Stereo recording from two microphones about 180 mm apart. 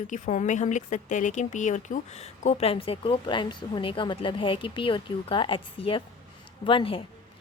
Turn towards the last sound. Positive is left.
turn(degrees=30)  # may be behind; listen again after turning